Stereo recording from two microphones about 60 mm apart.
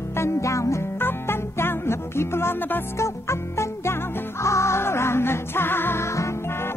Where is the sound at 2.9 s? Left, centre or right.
Left.